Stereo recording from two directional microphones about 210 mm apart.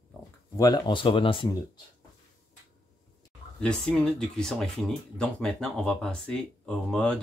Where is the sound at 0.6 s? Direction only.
20° left (ahead or behind).